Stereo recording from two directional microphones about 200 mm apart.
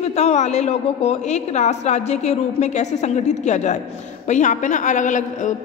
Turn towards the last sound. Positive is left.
turn(degrees=40)  # may be behind; listen again after turning